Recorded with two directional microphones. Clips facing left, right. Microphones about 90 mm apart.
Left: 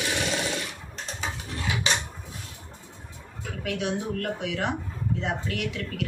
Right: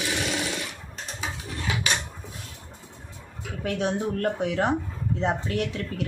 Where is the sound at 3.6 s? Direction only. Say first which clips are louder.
Right 3 dB; 35° right (ahead or behind).